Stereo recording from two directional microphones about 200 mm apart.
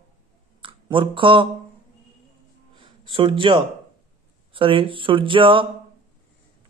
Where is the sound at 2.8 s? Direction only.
25° right (ahead or behind).